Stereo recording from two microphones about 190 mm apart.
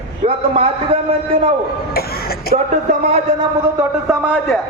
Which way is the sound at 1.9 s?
55° left (ahead or behind).